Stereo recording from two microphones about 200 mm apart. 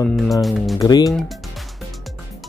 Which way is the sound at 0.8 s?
20° left (ahead or behind).